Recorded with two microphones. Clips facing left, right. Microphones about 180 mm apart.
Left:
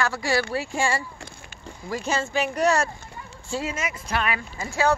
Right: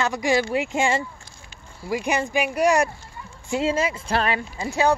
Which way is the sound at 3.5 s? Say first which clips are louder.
Right 7 dB; 30° right (ahead or behind).